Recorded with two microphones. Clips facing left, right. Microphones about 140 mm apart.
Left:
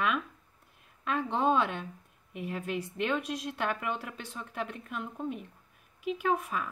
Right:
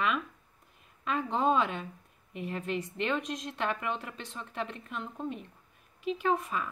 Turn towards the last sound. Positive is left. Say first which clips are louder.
# even
turn(degrees=5)  # may be behind; listen again after turning